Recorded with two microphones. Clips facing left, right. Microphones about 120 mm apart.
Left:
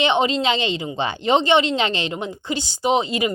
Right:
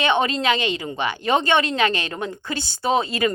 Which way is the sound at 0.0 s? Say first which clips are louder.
Left 1 dB; 20° left (ahead or behind).